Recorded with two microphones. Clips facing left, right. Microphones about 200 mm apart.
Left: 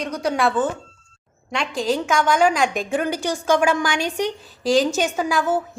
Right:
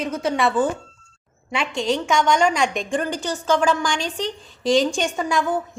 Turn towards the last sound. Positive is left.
turn(degrees=5)  # may be behind; listen again after turning